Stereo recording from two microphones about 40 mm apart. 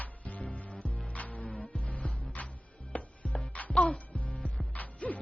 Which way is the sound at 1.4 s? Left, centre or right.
Left.